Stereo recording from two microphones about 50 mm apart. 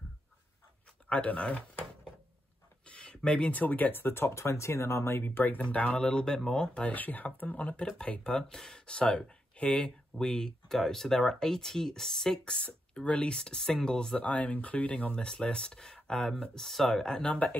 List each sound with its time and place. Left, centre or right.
1.0 s speech: left
2.9 s a sound: centre
3.6 s speech: left
5.2 s speech: left
5.6 s speech: left
6.0 s speech: centre
6.9 s speech: left; by 14.1 s centre
14.1 s speech: left
15.1 s speech: centre
16.5 s speech: centre
17.2 s speech: left